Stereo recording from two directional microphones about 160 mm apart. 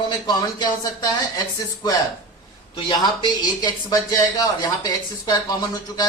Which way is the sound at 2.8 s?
25° left (ahead or behind).